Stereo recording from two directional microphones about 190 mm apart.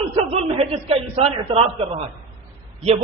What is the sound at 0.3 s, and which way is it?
A man's voice, 30° right (ahead or behind).